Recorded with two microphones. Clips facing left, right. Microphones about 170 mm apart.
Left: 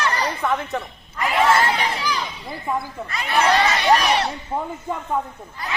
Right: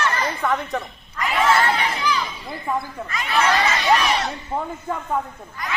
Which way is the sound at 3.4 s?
35° left (ahead or behind).